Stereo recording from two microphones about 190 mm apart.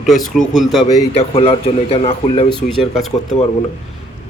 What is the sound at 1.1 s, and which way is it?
Speech, 30° left (ahead or behind).